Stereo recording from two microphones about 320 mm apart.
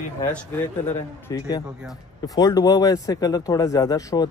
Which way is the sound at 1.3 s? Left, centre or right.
Centre.